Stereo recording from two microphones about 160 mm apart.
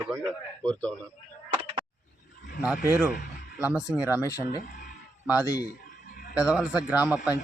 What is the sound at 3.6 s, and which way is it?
Speech, 5° right (ahead or behind).